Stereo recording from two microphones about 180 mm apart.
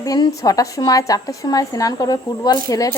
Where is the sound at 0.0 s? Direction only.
20° left (ahead or behind).